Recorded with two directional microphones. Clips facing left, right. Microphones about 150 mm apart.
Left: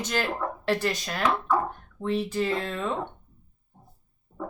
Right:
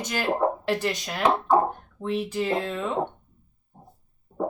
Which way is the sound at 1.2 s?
30° right (ahead or behind).